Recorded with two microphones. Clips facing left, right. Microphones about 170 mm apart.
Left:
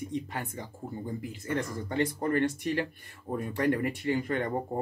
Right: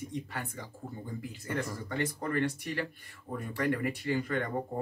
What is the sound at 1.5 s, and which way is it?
Speech, 20° left (ahead or behind).